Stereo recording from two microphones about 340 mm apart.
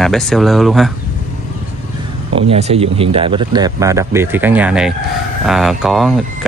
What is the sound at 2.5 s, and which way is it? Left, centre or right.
Speech, centre.